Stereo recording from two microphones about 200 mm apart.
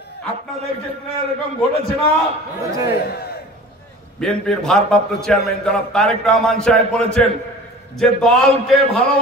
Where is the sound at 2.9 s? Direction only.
50° left (ahead or behind).